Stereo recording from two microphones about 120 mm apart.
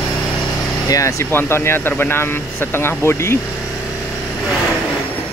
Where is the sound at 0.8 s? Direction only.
25° left (ahead or behind).